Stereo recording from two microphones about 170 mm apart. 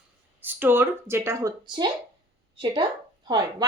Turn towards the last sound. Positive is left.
turn(degrees=-25)  # may be behind; listen again after turning